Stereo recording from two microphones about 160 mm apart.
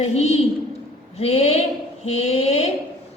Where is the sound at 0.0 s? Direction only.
45° left (ahead or behind).